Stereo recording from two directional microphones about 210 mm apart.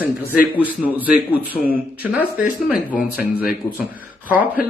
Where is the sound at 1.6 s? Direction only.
10° right (ahead or behind).